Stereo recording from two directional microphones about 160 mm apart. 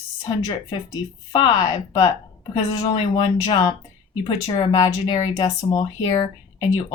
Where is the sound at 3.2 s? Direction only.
25° left (ahead or behind).